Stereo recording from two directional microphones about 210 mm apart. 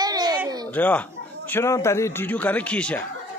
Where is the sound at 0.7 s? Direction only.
10° left (ahead or behind).